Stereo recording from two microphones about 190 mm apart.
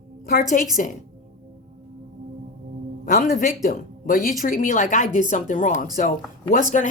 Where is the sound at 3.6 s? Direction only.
45° left (ahead or behind).